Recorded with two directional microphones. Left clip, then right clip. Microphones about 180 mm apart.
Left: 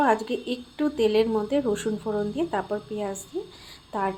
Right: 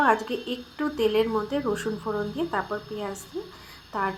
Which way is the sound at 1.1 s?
15° left (ahead or behind).